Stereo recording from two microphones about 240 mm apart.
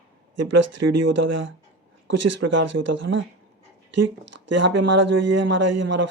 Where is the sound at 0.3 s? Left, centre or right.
Right.